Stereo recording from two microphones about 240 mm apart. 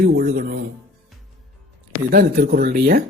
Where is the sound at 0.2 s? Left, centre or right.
Right.